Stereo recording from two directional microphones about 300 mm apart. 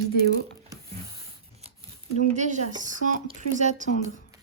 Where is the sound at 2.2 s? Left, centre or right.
Right.